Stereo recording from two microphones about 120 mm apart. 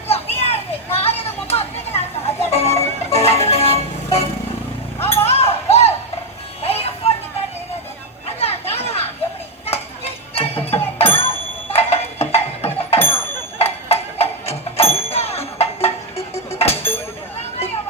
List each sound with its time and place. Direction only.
0.1 s children playing: 60° left (ahead or behind)
0.9 s chatter: 55° left (ahead or behind)
2.5 s music: 60° left (ahead or behind)
5.0 s a sound: 60° left (ahead or behind)
6.6 s music: 55° left (ahead or behind)
8.4 s children playing: 55° left (ahead or behind)
9.6 s music: 55° left (ahead or behind)
11.7 s a sound: 55° left (ahead or behind)
13.6 s music: 55° left (ahead or behind)